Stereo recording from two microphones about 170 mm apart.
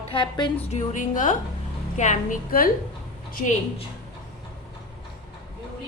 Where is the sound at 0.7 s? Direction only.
45° left (ahead or behind).